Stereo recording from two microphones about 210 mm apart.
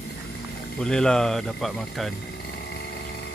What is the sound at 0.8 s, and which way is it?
Speech, 5° left (ahead or behind).